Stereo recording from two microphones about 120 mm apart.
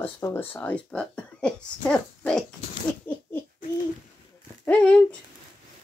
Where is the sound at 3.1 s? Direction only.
15° left (ahead or behind).